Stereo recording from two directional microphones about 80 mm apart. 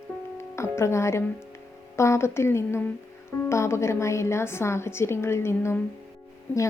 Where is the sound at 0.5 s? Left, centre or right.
Left.